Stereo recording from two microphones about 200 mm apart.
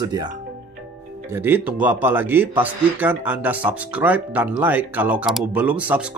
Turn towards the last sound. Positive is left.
turn(degrees=-5)  # may be behind; listen again after turning